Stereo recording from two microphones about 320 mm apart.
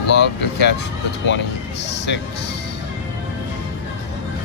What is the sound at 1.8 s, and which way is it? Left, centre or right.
Speech, left.